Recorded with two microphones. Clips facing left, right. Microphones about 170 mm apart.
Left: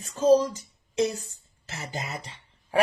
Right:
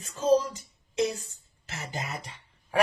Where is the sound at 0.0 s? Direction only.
35° left (ahead or behind).